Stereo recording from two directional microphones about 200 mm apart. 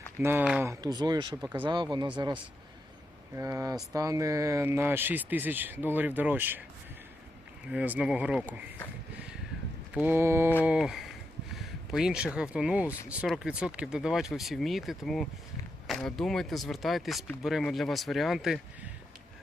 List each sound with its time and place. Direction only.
0.2 s speech: 10° right (ahead or behind)
7.7 s speech: 5° right (ahead or behind)
9.9 s speech: 10° right (ahead or behind)